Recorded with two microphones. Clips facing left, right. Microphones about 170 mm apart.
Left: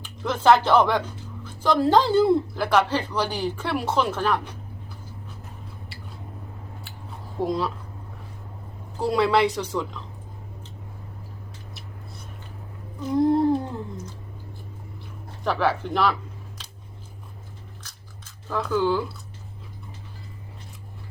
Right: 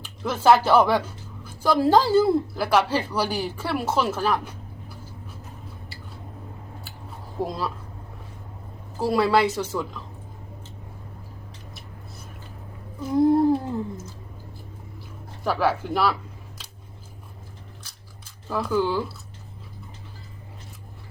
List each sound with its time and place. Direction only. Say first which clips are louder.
0.0 s speech: even; 10° right (ahead or behind)
7.4 s a woman's voice: left 4 dB; centre (ahead or behind)
9.0 s a woman's voice: even; 5° right (ahead or behind)
13.0 s humming: right 1 dB; 5° right (ahead or behind)
15.4 s speech: even; 5° right (ahead or behind)
18.4 s speech: even; 10° right (ahead or behind)